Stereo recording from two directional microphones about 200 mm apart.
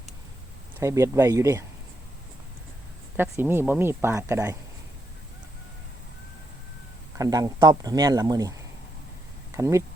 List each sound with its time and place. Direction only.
0.8 s speech: 15° right (ahead or behind)
3.2 s speech: 10° right (ahead or behind)
7.2 s speech: 15° right (ahead or behind)
9.6 s speech: 15° right (ahead or behind)